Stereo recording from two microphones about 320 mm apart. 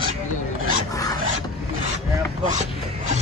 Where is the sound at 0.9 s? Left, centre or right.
Centre.